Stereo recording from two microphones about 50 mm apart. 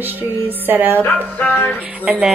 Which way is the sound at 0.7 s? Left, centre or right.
Right.